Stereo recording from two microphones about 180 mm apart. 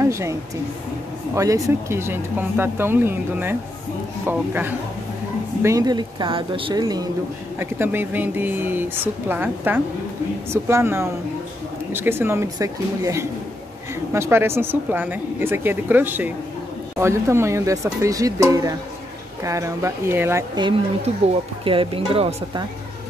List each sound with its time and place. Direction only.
0.0 s speech: 15° right (ahead or behind)
7.5 s speech: 10° right (ahead or behind)
21.6 s speech: 30° right (ahead or behind)